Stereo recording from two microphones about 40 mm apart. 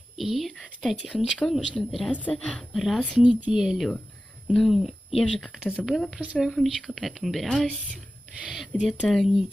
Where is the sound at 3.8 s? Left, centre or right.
Centre.